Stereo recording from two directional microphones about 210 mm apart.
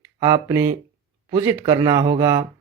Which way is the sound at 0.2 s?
15° right (ahead or behind).